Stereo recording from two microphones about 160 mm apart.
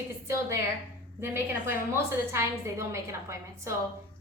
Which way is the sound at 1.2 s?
15° right (ahead or behind).